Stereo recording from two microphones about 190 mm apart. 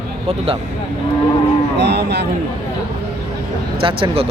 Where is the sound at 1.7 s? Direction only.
60° right (ahead or behind).